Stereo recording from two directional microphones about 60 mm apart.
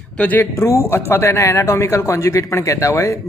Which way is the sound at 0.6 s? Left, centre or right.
Left.